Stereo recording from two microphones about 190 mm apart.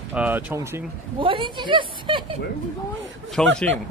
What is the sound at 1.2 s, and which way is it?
Speech, 25° right (ahead or behind).